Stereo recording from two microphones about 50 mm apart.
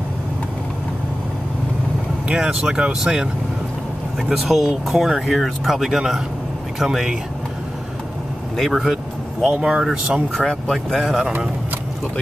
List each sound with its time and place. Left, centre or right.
2.2 s speech: centre
4.3 s speech: centre
8.5 s speech: centre
8.9 s speech: centre
10.3 s speech: centre
11.1 s speech: centre